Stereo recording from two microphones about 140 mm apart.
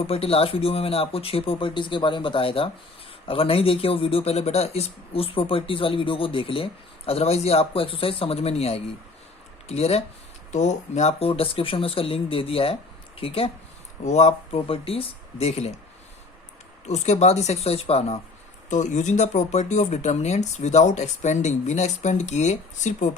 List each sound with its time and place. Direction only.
0.1 s a man's voice: 45° left (ahead or behind)
14.0 s speech: 55° left (ahead or behind)
16.8 s speech: 55° left (ahead or behind)
18.7 s speech: 60° left (ahead or behind)